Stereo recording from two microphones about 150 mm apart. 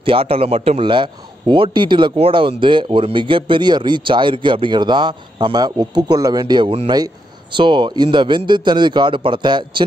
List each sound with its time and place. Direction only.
0.0 s a man's voice: 35° right (ahead or behind)